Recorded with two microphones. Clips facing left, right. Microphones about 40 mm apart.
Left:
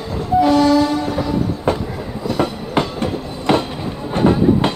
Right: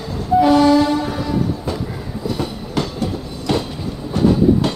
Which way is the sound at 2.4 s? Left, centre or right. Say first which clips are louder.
Left 4 dB; left.